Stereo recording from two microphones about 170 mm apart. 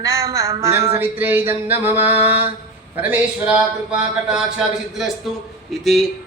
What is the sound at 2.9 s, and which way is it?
Speech, 10° right (ahead or behind).